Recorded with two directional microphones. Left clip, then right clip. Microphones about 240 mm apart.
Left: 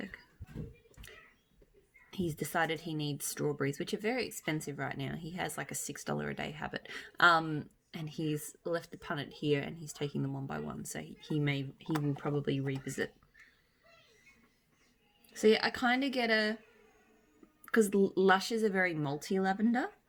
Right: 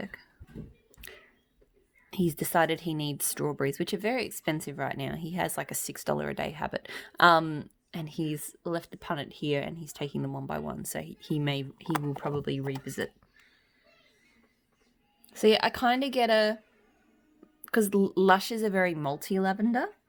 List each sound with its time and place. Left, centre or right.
0.1 s a sound: right
2.0 s speech: right
15.3 s speech: right
17.7 s speech: right